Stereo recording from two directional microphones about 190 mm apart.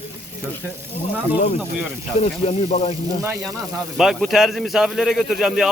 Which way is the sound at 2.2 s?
35° left (ahead or behind).